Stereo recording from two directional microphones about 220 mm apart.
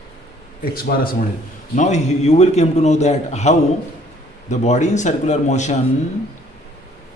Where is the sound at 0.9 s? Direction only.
45° left (ahead or behind).